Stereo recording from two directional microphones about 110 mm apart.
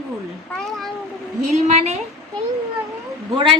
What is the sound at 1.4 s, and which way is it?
Speech, 80° right.